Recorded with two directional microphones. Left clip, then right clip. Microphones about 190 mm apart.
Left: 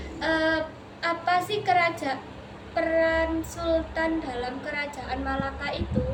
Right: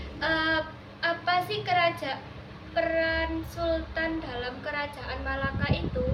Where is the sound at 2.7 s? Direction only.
15° left (ahead or behind).